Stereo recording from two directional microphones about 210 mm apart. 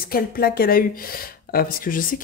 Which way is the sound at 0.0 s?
45° left (ahead or behind).